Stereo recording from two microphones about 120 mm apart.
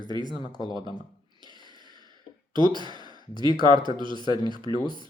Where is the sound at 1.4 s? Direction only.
40° right (ahead or behind).